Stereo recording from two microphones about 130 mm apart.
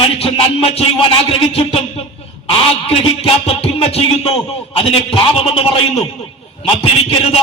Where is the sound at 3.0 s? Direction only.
45° left (ahead or behind).